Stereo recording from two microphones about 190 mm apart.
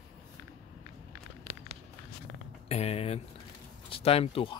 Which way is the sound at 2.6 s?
35° left (ahead or behind).